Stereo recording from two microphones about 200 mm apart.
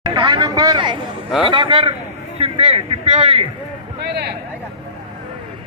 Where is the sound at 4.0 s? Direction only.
55° right (ahead or behind).